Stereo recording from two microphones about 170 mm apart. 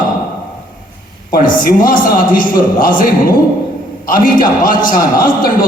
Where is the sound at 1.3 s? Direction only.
55° left (ahead or behind).